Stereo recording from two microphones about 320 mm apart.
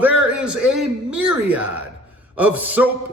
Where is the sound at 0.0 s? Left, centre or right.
Centre.